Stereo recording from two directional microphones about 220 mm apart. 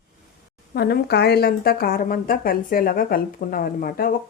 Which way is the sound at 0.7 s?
45° left (ahead or behind).